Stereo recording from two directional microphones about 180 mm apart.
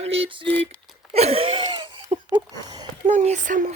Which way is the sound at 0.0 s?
30° right (ahead or behind).